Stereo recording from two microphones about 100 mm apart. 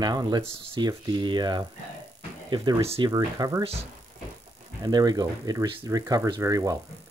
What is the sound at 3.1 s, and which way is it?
Speech, 35° right (ahead or behind).